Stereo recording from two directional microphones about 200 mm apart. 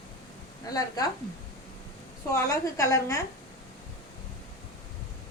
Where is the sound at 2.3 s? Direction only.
15° left (ahead or behind).